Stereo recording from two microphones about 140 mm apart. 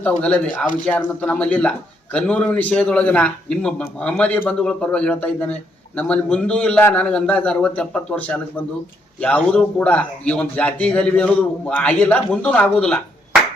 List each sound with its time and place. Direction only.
0.0 s a man's voice: 10° left (ahead or behind)